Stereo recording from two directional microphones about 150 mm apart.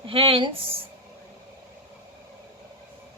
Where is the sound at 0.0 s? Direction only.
40° right (ahead or behind).